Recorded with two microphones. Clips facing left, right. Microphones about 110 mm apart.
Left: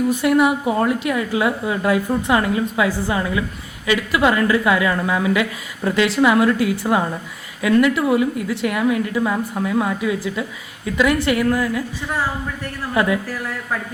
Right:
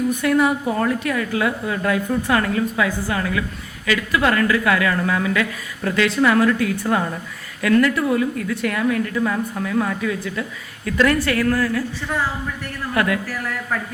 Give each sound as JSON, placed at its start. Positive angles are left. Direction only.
{"t": 0.2, "sound": "a woman's voice", "side_deg": 15}